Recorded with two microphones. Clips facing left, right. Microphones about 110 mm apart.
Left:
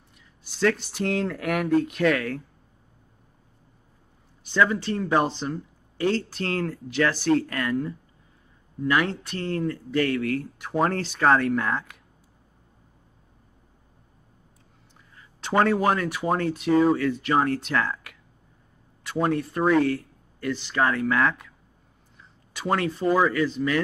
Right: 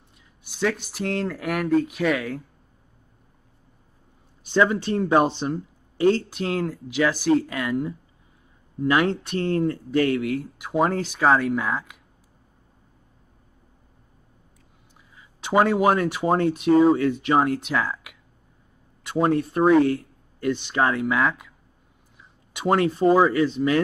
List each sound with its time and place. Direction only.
0.5 s speech: 10° right (ahead or behind)
4.5 s speech: 20° right (ahead or behind)
8.8 s speech: 20° right (ahead or behind); by 12.0 s 5° right (ahead or behind)
15.1 s speech: 10° right (ahead or behind)
19.0 s speech: 20° right (ahead or behind)
22.5 s speech: 20° right (ahead or behind)